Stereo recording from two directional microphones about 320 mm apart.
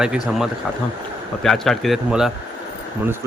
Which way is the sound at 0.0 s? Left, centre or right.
Centre.